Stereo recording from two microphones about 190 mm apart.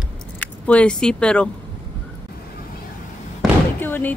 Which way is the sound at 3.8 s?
10° left (ahead or behind).